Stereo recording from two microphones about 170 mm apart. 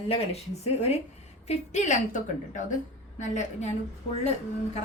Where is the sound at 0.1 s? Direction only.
40° left (ahead or behind).